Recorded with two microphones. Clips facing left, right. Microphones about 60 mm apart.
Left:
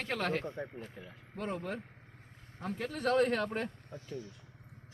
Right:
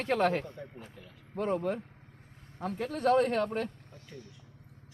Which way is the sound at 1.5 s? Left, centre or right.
Right.